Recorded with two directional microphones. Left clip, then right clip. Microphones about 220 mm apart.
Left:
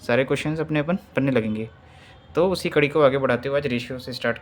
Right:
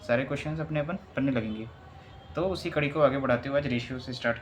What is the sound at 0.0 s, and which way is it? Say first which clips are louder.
Speech: left 7 dB; 55° left (ahead or behind).